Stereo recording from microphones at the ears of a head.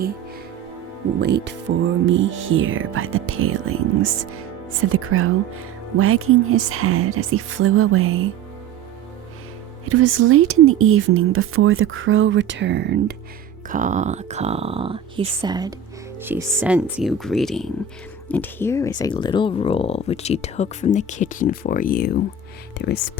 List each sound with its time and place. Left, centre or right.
1.0 s speech: right
9.8 s speech: right
16.6 s speech: centre
18.7 s speech: left